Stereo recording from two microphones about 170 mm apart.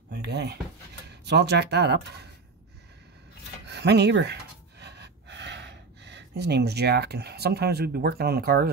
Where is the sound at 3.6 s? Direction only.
80° right.